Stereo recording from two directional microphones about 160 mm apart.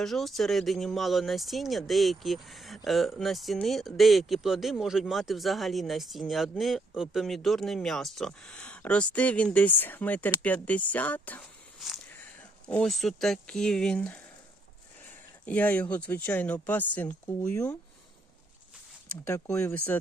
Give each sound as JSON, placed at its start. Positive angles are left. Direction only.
{"t": 0.0, "sound": "speech", "side_deg": 0}
{"t": 15.4, "sound": "speech", "side_deg": 10}
{"t": 19.1, "sound": "speech", "side_deg": 15}